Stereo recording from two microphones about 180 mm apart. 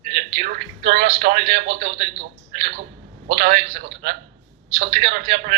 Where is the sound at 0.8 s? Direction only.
65° right (ahead or behind).